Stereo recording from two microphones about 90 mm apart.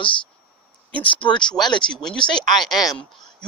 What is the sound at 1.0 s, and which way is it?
Speech, 70° left (ahead or behind).